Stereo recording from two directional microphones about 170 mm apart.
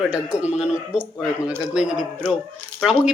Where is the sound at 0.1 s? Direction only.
5° right (ahead or behind).